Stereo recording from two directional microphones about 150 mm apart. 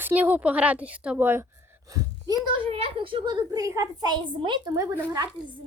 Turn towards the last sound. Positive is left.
turn(degrees=-25)  # may be behind; listen again after turning